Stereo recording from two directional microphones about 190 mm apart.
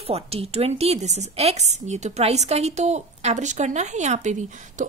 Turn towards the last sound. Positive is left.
turn(degrees=-40)  # may be behind; listen again after turning